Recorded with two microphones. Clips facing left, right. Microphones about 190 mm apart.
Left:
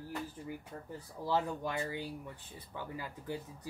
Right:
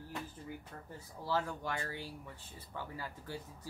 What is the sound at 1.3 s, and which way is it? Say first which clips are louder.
Speech: left 3 dB; 20° left (ahead or behind).